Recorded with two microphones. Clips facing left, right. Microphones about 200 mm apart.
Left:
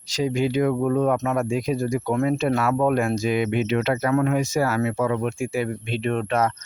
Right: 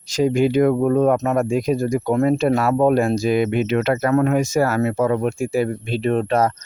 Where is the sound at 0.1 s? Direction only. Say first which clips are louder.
Right 5 dB; 50° right (ahead or behind).